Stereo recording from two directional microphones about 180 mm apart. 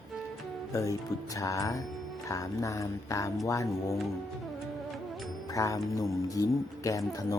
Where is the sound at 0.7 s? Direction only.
20° left (ahead or behind).